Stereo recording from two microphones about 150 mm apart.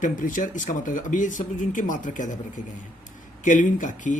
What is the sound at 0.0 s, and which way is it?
Speech, 60° left (ahead or behind).